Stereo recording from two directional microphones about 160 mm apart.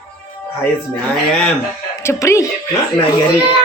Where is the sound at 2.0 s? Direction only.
15° left (ahead or behind).